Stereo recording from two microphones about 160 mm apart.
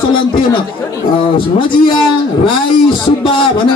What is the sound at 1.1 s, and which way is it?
Speech, 35° left (ahead or behind).